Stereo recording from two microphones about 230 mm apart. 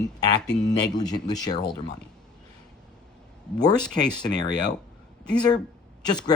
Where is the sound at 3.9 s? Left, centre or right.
Centre.